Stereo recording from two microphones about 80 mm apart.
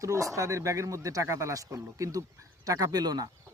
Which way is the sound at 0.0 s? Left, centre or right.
Right.